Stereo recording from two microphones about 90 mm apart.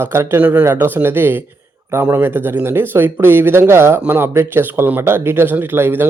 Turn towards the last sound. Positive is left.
turn(degrees=-25)  # may be behind; listen again after turning